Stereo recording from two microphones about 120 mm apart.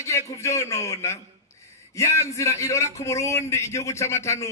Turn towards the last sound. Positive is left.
turn(degrees=25)  # may be behind; listen again after turning